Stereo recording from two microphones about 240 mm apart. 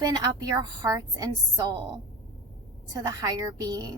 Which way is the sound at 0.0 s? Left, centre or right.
Centre.